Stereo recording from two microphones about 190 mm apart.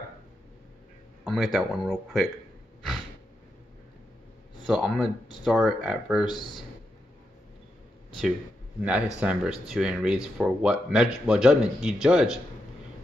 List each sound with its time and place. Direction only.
1.2 s speech: centre (ahead or behind)
4.6 s speech: 5° right (ahead or behind)
6.2 s speech: 25° left (ahead or behind)
8.8 s speech: 5° right (ahead or behind)